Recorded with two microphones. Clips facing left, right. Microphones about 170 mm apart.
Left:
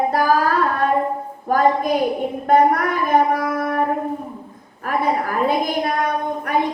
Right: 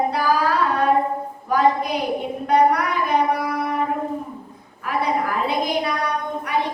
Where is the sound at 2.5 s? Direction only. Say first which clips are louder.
Left 2 dB; 50° left (ahead or behind).